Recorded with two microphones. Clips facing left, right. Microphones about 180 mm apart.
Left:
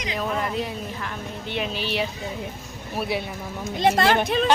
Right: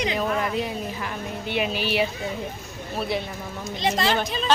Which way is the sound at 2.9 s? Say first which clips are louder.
Even; 10° left (ahead or behind).